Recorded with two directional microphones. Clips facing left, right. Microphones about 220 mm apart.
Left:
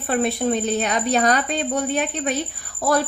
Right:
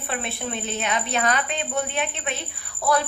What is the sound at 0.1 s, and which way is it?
A woman's voice, 40° left (ahead or behind).